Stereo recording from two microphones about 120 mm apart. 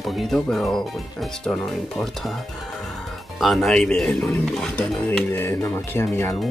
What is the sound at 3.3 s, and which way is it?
Speech, centre (ahead or behind).